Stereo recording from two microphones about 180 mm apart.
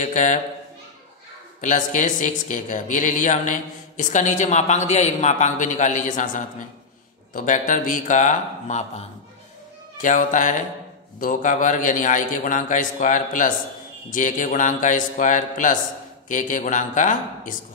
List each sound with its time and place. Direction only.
0.0 s speech: 45° left (ahead or behind)
1.6 s speech: 45° left (ahead or behind)
10.0 s speech: 45° left (ahead or behind)